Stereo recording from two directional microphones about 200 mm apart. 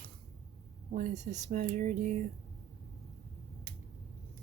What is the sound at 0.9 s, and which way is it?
Speech, 35° right (ahead or behind).